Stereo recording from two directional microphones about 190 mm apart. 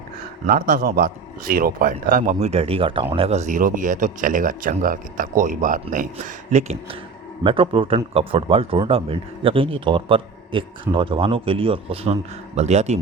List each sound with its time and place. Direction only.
0.4 s a man's voice: 50° right (ahead or behind)
7.4 s speech: 25° right (ahead or behind)